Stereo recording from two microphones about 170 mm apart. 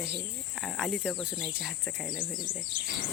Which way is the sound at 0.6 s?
Centre (ahead or behind).